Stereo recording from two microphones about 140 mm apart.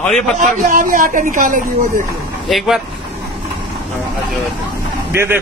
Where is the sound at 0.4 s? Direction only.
75° right (ahead or behind).